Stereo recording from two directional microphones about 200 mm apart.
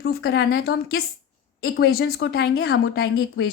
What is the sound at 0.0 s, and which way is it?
A woman's voice, 50° left (ahead or behind).